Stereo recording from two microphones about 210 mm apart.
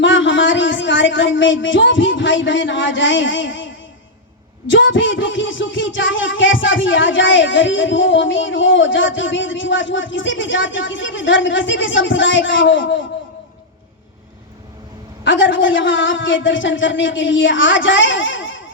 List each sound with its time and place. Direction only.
0.0 s speech: 60° left (ahead or behind)
4.7 s music: 65° left (ahead or behind)
15.2 s music: 60° left (ahead or behind)